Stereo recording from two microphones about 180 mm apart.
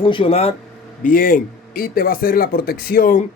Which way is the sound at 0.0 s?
30° left (ahead or behind).